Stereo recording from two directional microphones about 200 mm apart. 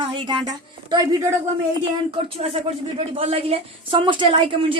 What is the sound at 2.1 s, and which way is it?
A woman's voice, 30° right (ahead or behind).